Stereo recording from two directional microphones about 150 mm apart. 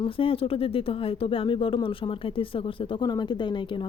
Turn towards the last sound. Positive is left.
turn(degrees=30)  # may be behind; listen again after turning